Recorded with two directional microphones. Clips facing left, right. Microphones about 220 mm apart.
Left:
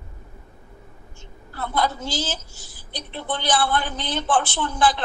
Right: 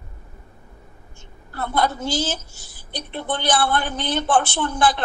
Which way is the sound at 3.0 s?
55° right (ahead or behind).